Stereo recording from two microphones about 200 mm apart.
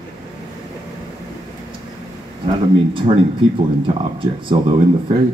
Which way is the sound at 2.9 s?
25° right (ahead or behind).